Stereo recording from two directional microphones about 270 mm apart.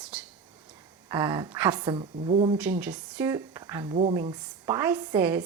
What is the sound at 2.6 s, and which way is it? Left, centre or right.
A woman's voice, centre.